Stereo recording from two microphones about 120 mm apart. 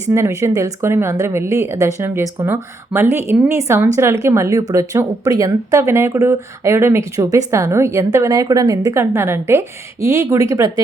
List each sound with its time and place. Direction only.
0.1 s a woman's voice: 25° right (ahead or behind)